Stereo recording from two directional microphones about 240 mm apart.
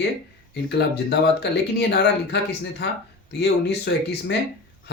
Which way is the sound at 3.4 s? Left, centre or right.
Left.